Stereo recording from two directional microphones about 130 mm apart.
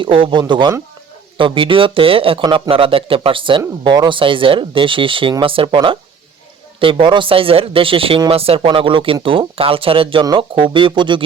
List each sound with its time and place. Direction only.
0.0 s speech: 40° right (ahead or behind)